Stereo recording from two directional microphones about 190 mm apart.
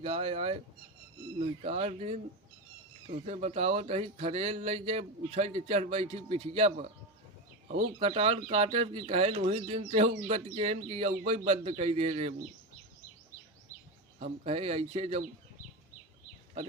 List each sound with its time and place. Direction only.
0.0 s speech: 30° right (ahead or behind)
14.2 s speech: 35° right (ahead or behind)